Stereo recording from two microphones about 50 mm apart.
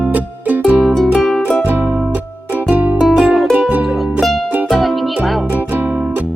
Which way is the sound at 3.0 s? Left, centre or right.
Centre.